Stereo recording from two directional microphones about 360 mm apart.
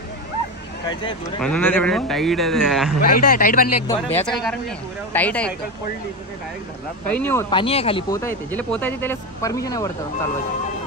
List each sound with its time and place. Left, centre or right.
0.8 s speech: centre
3.0 s speech: left
3.8 s speech: centre
7.1 s speech: centre